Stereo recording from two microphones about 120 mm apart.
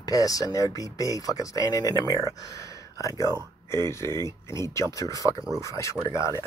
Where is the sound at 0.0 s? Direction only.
30° left (ahead or behind).